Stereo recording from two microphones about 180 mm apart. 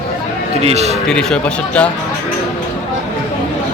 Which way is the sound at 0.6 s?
35° right (ahead or behind).